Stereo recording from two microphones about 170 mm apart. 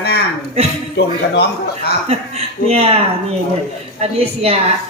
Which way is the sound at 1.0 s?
80° left.